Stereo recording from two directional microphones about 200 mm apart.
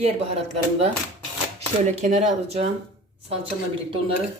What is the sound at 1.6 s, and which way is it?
Speech, 35° right (ahead or behind).